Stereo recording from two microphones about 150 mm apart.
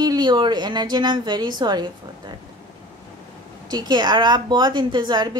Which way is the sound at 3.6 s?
30° right (ahead or behind).